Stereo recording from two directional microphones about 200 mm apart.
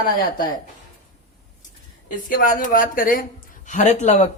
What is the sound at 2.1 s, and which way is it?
Speech, 45° left (ahead or behind).